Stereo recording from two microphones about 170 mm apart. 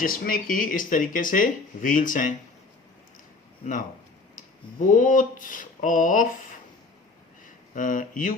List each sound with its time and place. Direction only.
0.0 s speech: 55° left (ahead or behind)
3.6 s speech: 50° left (ahead or behind)
4.4 s a sound: 50° left (ahead or behind)
7.4 s speech: 50° left (ahead or behind)